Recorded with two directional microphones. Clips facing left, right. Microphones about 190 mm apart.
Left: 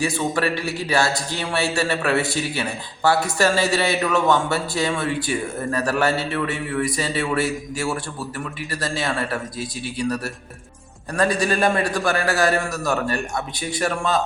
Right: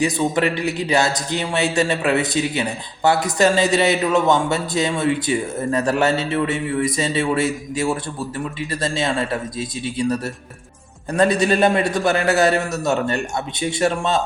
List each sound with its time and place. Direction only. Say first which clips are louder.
0.0 s speech: right 3 dB; 20° right (ahead or behind)